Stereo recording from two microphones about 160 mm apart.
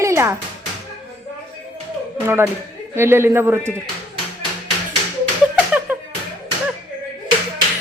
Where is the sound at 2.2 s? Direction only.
15° right (ahead or behind).